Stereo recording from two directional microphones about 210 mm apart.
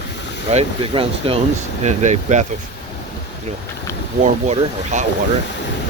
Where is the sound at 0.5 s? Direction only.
25° right (ahead or behind).